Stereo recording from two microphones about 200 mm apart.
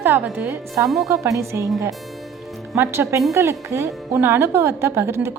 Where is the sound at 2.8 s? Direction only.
15° right (ahead or behind).